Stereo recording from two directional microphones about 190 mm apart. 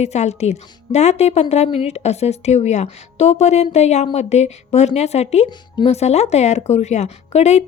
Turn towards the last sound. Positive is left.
turn(degrees=35)  # may be behind; listen again after turning